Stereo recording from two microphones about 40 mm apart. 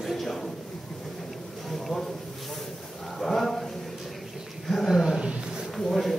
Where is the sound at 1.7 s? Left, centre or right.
Centre.